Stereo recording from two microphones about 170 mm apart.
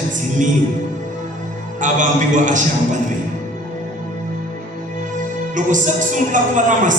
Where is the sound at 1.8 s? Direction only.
50° right (ahead or behind).